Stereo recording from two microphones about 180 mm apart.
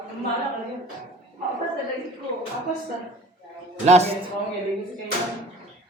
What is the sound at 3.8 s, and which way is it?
Speech, 35° right (ahead or behind).